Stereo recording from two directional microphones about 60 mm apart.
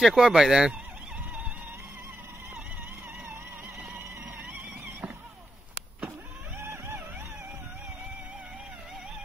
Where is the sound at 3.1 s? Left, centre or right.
Right.